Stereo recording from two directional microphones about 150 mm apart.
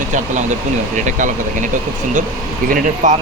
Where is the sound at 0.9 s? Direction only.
55° right (ahead or behind).